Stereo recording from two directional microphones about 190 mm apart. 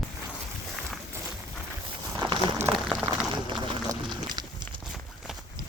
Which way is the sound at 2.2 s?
25° right (ahead or behind).